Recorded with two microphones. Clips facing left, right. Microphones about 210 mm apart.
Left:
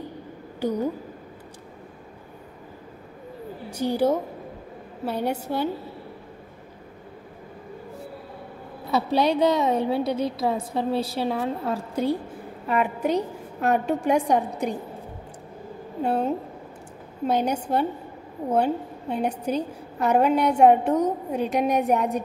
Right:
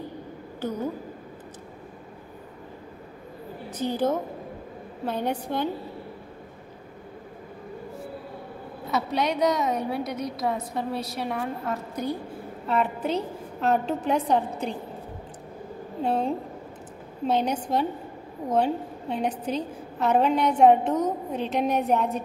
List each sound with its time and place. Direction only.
3.7 s a woman's voice: 10° left (ahead or behind)
8.9 s a woman's voice: 30° left (ahead or behind)
12.6 s a woman's voice: 10° left (ahead or behind)
16.0 s a woman's voice: 10° left (ahead or behind)